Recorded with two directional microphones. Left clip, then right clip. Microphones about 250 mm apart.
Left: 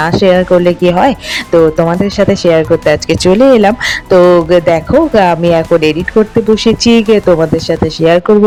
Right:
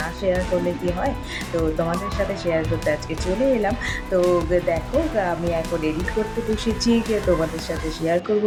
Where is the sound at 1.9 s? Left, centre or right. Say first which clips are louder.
Left 14 dB; left.